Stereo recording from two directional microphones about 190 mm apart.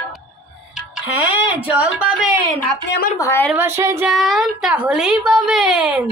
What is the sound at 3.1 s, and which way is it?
Speech, 15° left (ahead or behind).